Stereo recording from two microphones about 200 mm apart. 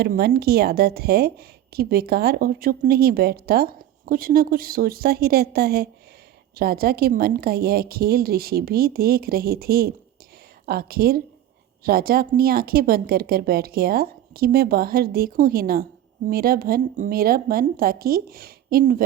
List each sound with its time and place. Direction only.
0.0 s speech: 50° right (ahead or behind)